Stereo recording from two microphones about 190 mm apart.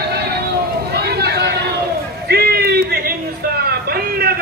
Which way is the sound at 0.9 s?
55° right (ahead or behind).